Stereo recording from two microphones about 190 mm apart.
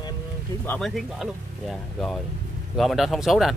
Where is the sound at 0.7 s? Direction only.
Centre (ahead or behind).